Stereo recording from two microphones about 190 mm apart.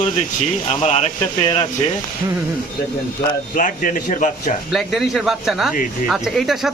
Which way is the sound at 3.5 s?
45° left (ahead or behind).